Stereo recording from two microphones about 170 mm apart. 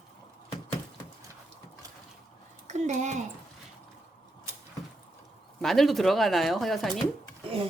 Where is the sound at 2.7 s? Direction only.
45° right (ahead or behind).